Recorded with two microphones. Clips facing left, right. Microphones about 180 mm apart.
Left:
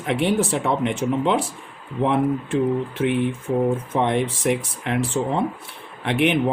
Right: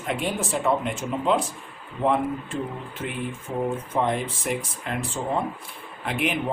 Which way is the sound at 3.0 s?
75° left (ahead or behind).